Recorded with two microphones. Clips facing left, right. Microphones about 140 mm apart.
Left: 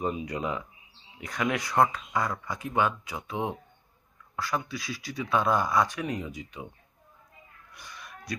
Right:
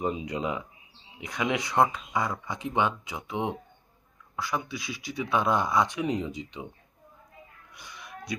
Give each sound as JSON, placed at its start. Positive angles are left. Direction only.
{"t": 0.0, "sound": "speech", "side_deg": -20}
{"t": 7.7, "sound": "wheeze", "side_deg": -15}